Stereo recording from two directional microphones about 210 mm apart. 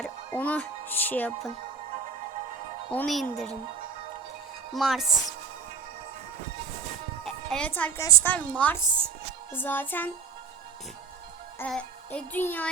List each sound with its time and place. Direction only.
0.3 s a woman's voice: 10° left (ahead or behind)
2.9 s speech: 5° left (ahead or behind)
4.7 s speech: centre (ahead or behind)
7.3 s a woman's voice: 5° left (ahead or behind)
11.6 s music: 5° left (ahead or behind)